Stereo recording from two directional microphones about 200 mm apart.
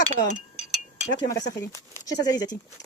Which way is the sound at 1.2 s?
15° left (ahead or behind).